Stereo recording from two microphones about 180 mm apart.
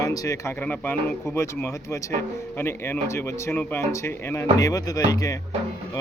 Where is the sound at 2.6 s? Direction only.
10° left (ahead or behind).